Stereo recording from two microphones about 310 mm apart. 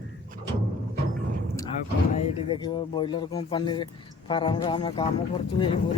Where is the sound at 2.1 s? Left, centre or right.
Centre.